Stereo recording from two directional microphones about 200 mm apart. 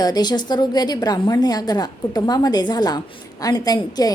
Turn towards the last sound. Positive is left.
turn(degrees=20)  # may be behind; listen again after turning